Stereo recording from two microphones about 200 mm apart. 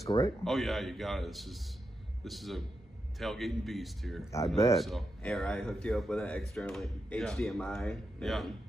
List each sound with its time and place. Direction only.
0.0 s speech: 15° left (ahead or behind)
0.4 s speech: centre (ahead or behind)